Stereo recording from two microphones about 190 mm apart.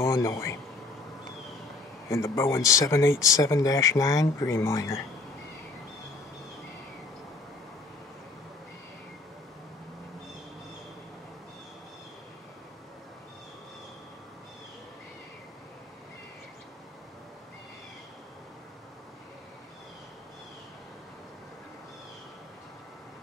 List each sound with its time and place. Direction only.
0.0 s speech: 15° left (ahead or behind)
2.0 s speech: 15° left (ahead or behind)